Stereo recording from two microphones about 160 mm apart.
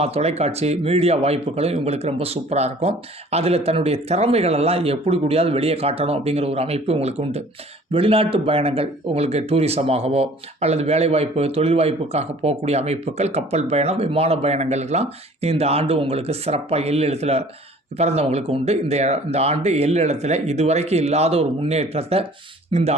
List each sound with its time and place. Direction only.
0.0 s speech: 40° right (ahead or behind)